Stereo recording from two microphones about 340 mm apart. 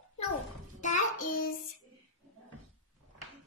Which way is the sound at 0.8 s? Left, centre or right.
Left.